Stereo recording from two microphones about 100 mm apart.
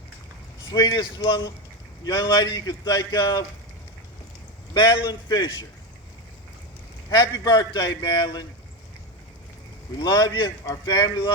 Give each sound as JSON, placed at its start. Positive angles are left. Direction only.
{"t": 0.7, "sound": "a man's voice", "side_deg": 40}
{"t": 4.7, "sound": "a man's voice", "side_deg": 40}
{"t": 7.1, "sound": "a man's voice", "side_deg": 45}
{"t": 10.0, "sound": "speech", "side_deg": 40}